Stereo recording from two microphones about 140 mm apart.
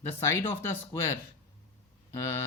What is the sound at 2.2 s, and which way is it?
Speech, 20° left (ahead or behind).